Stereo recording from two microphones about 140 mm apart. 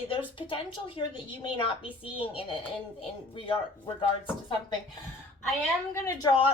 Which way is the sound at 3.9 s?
40° left (ahead or behind).